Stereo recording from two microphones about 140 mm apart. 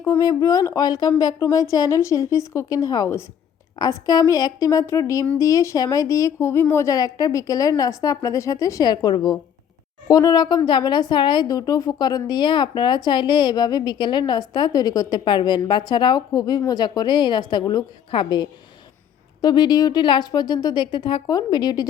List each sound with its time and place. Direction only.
0.0 s a woman's voice: 25° left (ahead or behind)